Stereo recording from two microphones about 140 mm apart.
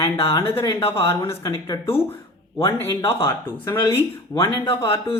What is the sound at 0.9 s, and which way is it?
Speech, 20° left (ahead or behind).